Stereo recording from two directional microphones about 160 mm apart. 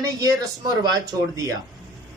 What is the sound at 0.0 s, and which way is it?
A man's voice, 25° right (ahead or behind).